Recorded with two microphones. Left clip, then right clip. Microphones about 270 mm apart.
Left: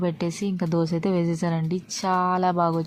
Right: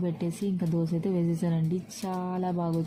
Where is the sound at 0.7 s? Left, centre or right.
Left.